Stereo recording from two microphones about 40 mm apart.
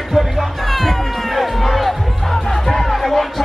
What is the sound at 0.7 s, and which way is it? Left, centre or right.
Cat, centre.